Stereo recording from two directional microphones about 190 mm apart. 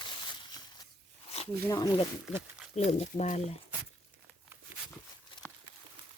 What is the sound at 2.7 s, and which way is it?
Speech, 35° left (ahead or behind).